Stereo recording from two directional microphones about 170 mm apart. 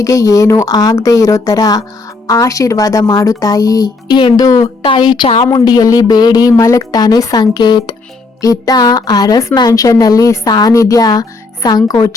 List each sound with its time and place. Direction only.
0.0 s speech: 20° left (ahead or behind)